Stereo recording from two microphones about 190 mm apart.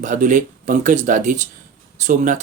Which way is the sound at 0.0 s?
45° right (ahead or behind).